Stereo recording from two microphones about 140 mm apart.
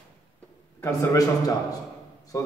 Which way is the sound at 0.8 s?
20° left (ahead or behind).